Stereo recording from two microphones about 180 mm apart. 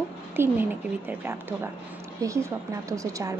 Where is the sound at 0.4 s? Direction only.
10° right (ahead or behind).